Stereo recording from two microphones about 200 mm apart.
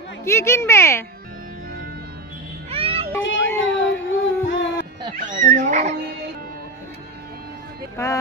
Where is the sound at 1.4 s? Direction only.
45° right (ahead or behind).